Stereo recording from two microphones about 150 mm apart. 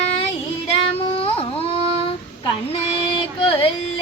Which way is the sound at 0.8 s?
40° left (ahead or behind).